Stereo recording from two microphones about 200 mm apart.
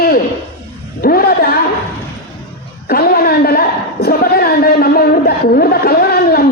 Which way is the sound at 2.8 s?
50° left (ahead or behind).